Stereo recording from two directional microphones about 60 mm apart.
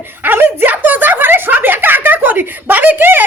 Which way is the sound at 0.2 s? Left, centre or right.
Right.